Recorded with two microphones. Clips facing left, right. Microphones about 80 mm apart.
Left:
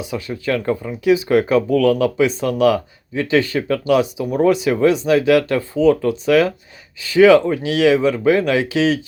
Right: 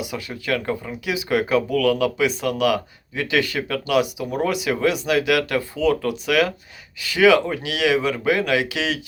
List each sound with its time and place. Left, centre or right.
1.0 s speech: left